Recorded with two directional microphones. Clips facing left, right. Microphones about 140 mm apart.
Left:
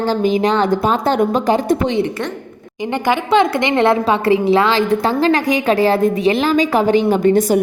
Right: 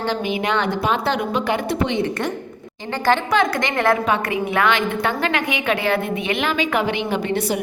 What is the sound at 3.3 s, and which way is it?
A woman's voice, 25° left (ahead or behind).